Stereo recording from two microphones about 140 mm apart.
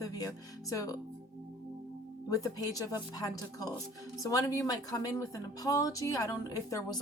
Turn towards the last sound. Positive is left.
turn(degrees=25)  # may be behind; listen again after turning